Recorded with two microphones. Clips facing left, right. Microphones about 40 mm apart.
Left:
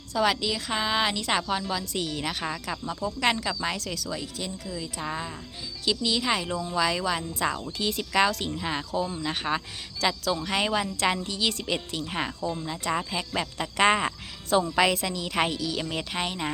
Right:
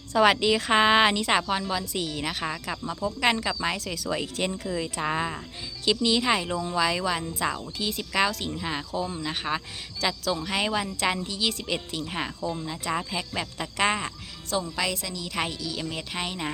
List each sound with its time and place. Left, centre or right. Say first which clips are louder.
0.1 s a woman's voice: right 5 dB; right
1.1 s a woman's voice: right 2 dB; centre
4.4 s speech: right 6 dB; right
5.8 s a woman's voice: right 3 dB; centre
14.5 s a woman's voice: left 6 dB; left
15.4 s speech: left 3 dB; centre